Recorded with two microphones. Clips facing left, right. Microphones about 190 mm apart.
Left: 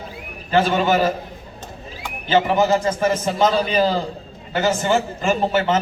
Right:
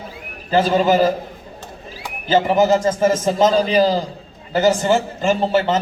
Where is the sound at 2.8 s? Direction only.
40° right (ahead or behind).